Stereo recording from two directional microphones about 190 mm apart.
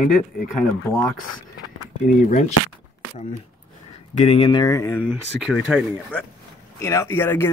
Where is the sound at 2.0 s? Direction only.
40° left (ahead or behind).